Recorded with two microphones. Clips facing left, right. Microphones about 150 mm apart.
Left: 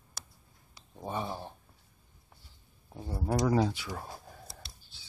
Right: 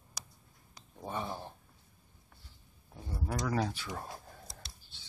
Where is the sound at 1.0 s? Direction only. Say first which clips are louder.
Left 2 dB; 15° left (ahead or behind).